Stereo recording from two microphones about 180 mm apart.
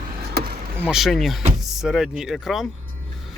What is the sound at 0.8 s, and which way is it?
Speech, centre (ahead or behind).